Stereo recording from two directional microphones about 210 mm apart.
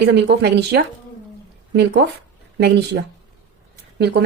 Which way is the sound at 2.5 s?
55° right (ahead or behind).